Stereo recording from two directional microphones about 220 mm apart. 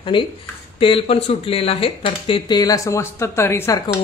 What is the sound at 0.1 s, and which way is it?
Speech, 20° left (ahead or behind).